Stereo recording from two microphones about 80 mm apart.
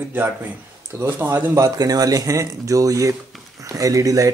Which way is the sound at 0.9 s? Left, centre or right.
Right.